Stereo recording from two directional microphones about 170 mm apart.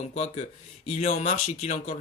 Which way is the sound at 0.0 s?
40° left (ahead or behind).